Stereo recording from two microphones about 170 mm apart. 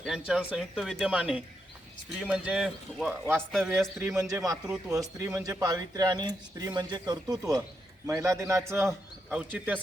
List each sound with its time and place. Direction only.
0.0 s a man's voice: 5° right (ahead or behind)